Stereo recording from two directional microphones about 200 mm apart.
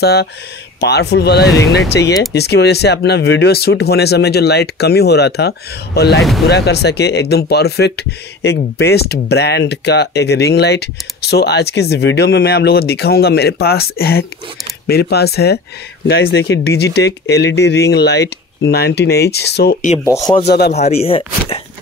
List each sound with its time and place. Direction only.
0.0 s speech: 55° left (ahead or behind)
20.7 s speech: 30° left (ahead or behind)